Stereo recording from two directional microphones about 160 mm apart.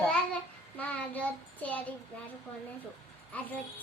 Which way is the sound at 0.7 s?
10° left (ahead or behind).